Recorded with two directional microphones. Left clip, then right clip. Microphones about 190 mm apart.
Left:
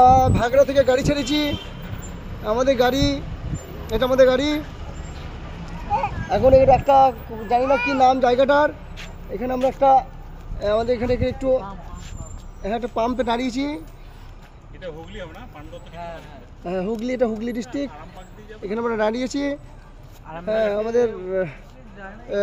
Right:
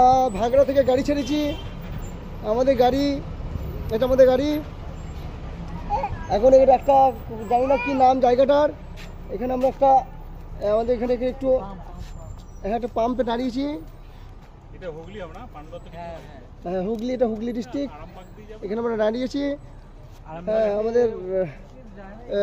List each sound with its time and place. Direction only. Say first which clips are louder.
0.1 s a child's voice: left 2 dB; centre (ahead or behind)
5.9 s a child's voice: left 2 dB; centre (ahead or behind)
12.6 s speech: even; 10° left (ahead or behind)
16.6 s speech: left 1 dB; 15° left (ahead or behind)